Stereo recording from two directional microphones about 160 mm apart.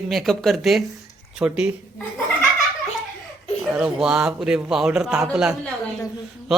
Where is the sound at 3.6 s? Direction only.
5° right (ahead or behind).